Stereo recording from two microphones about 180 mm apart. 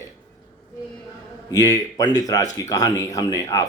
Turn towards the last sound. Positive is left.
turn(degrees=20)  # may be behind; listen again after turning